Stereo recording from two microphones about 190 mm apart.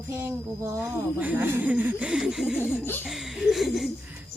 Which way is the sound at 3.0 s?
Centre (ahead or behind).